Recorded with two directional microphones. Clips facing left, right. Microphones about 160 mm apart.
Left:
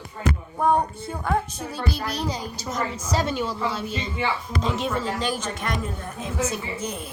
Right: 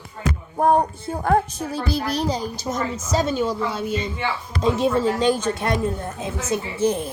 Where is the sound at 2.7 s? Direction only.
30° right (ahead or behind).